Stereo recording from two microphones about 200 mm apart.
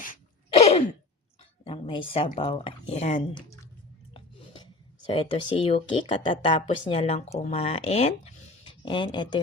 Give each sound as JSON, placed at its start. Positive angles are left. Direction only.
{"t": 0.0, "sound": "throat clearing", "side_deg": 35}
{"t": 1.6, "sound": "speech", "side_deg": 25}
{"t": 5.1, "sound": "speech", "side_deg": 25}